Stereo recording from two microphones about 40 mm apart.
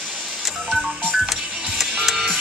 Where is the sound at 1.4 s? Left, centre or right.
Right.